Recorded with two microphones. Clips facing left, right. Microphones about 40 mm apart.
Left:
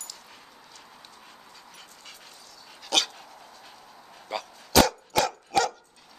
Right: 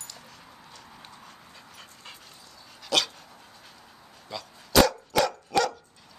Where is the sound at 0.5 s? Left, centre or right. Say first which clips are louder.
Right 1 dB; centre.